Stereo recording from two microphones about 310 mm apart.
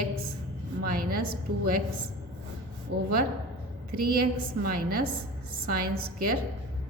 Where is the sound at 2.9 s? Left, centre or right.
Right.